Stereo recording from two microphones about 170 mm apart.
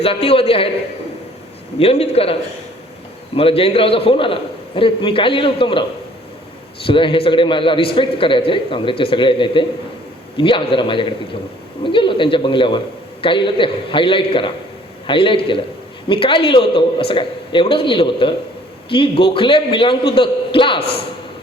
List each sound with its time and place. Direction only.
0.0 s a man's voice: 35° left (ahead or behind)
1.8 s a man's voice: 35° left (ahead or behind)
3.3 s a man's voice: 35° left (ahead or behind)
6.8 s a man's voice: 30° left (ahead or behind)